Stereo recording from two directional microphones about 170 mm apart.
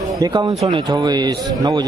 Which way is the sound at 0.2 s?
20° right (ahead or behind).